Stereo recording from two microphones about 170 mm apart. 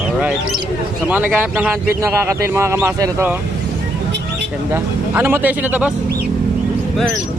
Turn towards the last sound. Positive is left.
turn(degrees=-10)  # may be behind; listen again after turning